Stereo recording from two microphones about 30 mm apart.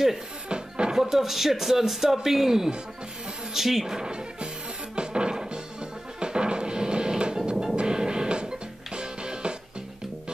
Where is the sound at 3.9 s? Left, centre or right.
Right.